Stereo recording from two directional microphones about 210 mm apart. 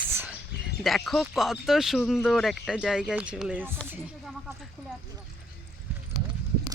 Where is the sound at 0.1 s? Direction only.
10° right (ahead or behind).